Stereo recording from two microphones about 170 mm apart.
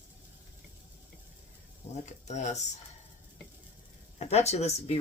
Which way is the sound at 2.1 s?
45° left (ahead or behind).